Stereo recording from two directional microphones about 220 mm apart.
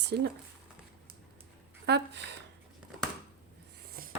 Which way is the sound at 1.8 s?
50° right (ahead or behind).